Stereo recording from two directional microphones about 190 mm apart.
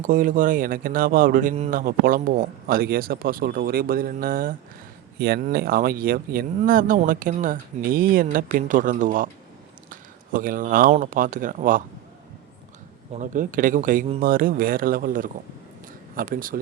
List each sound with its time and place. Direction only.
0.0 s speech: 45° right (ahead or behind)
9.9 s a sound: 45° right (ahead or behind)
10.9 s speech: 45° right (ahead or behind)
13.1 s speech: 40° right (ahead or behind)